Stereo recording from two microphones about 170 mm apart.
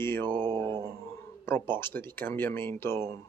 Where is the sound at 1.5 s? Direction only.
15° left (ahead or behind).